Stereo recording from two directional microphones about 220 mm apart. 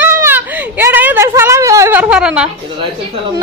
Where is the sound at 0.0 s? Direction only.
10° right (ahead or behind).